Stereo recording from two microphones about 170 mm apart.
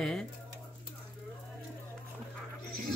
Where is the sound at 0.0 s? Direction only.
5° left (ahead or behind).